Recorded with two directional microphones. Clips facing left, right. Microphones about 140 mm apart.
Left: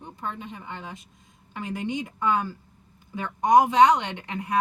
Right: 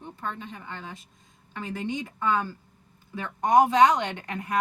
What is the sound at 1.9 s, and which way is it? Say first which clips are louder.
Speech: left 1 dB; 20° left (ahead or behind).